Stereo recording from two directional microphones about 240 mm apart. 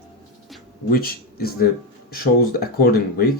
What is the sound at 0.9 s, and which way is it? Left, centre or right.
Speech, left.